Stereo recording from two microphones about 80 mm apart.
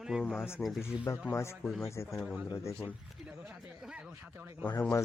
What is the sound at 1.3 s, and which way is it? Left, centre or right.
Speech, left.